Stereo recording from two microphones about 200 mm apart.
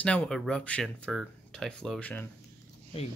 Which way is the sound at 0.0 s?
5° left (ahead or behind).